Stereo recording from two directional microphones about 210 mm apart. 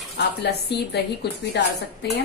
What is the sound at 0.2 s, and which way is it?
Speech, 50° left (ahead or behind).